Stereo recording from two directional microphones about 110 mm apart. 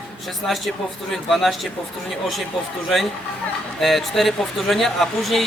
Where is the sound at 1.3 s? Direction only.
Centre (ahead or behind).